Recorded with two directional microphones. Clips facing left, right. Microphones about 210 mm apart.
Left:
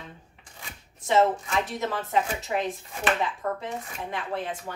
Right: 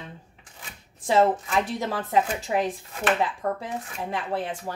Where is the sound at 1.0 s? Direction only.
30° right (ahead or behind).